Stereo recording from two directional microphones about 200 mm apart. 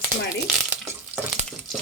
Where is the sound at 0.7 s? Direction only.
5° right (ahead or behind).